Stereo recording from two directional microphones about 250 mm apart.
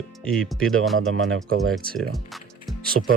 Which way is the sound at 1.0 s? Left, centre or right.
Right.